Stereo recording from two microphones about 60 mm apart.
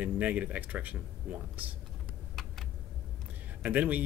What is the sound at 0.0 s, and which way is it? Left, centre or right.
Speech, right.